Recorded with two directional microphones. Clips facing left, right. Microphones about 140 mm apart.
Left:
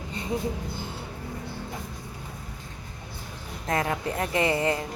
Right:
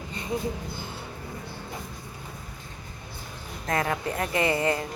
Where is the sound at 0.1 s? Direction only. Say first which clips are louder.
Left 2 dB; 30° left (ahead or behind).